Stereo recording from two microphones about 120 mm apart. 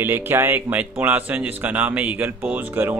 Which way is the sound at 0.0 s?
20° right (ahead or behind).